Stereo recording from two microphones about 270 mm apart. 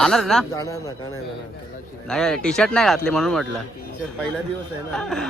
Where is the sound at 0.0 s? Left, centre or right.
Centre.